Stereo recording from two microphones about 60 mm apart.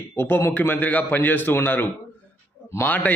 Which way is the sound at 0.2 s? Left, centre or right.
Left.